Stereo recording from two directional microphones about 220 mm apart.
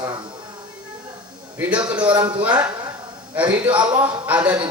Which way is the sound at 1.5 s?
5° right (ahead or behind).